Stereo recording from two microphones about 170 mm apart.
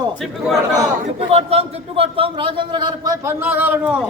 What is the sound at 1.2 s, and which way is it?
A man's voice, 35° right (ahead or behind).